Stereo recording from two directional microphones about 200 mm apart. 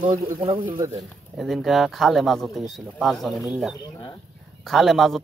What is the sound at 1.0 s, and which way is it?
Speech, centre (ahead or behind).